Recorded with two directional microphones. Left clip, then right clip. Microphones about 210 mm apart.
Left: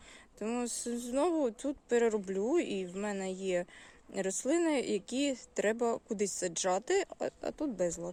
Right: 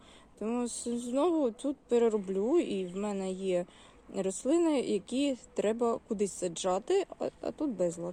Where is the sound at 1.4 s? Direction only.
35° left (ahead or behind).